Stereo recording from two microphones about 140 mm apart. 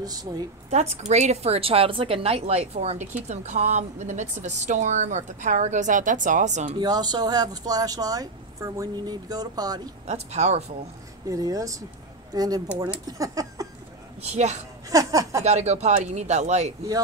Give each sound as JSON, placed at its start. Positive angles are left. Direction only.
{"t": 0.0, "sound": "speech", "side_deg": -30}
{"t": 0.7, "sound": "a woman's voice", "side_deg": -55}
{"t": 6.8, "sound": "speech", "side_deg": -30}
{"t": 10.0, "sound": "a woman's voice", "side_deg": -55}
{"t": 11.2, "sound": "speech", "side_deg": -25}
{"t": 13.2, "sound": "a sound", "side_deg": -25}
{"t": 14.2, "sound": "a woman's voice", "side_deg": -55}
{"t": 14.9, "sound": "speech", "side_deg": -25}
{"t": 15.4, "sound": "a woman's voice", "side_deg": -55}